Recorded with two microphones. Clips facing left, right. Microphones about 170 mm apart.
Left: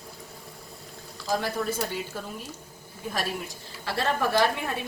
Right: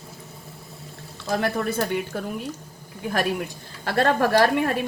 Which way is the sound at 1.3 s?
65° right (ahead or behind).